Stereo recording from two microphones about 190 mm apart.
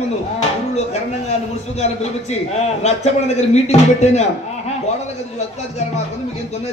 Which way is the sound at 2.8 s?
35° left (ahead or behind).